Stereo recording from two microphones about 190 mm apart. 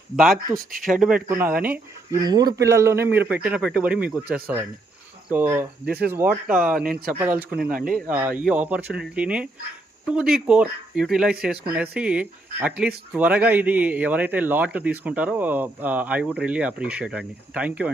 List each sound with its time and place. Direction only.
0.7 s speech: 45° right (ahead or behind)
0.9 s a man's voice: 5° right (ahead or behind)
2.2 s a man's voice: 20° right (ahead or behind)
5.8 s speech: 55° right (ahead or behind)
6.5 s speech: 5° right (ahead or behind)
6.8 s speech: 50° right (ahead or behind)
7.1 s a man's voice: 10° right (ahead or behind)
7.5 s speech: 50° right (ahead or behind)
8.1 s a man's voice: 5° right (ahead or behind)